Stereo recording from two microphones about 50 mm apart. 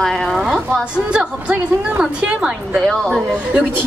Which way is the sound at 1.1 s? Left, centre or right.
Right.